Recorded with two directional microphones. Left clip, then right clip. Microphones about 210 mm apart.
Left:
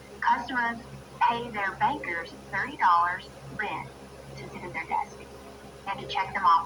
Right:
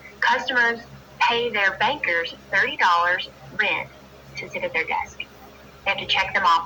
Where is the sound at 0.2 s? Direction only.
35° right (ahead or behind).